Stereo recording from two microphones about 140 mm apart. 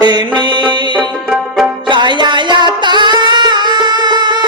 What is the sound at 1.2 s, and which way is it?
Music, centre (ahead or behind).